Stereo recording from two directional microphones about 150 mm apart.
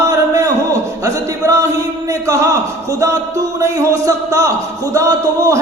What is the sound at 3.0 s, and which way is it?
Speech, 20° right (ahead or behind).